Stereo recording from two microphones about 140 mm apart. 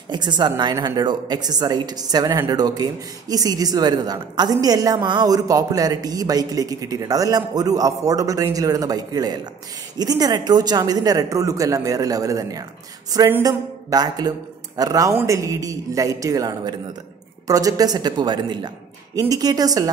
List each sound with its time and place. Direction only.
0.1 s a woman's voice: 30° right (ahead or behind)